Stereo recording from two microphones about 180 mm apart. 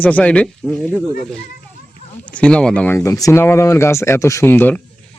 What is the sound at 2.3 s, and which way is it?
Speech, 5° left (ahead or behind).